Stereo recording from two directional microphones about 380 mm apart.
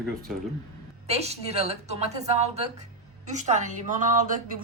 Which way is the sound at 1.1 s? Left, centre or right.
Centre.